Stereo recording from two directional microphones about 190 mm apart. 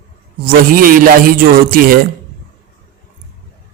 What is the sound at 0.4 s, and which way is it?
A man's voice, 50° right (ahead or behind).